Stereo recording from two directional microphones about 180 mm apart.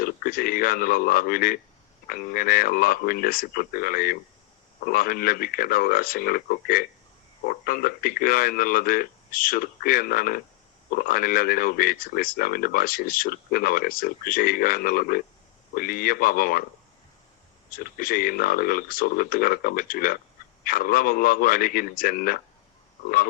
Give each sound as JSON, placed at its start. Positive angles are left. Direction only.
{"t": 0.0, "sound": "speech", "side_deg": 55}
{"t": 17.7, "sound": "speech", "side_deg": 55}